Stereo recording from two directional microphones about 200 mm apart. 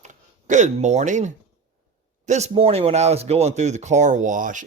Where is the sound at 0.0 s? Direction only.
40° right (ahead or behind).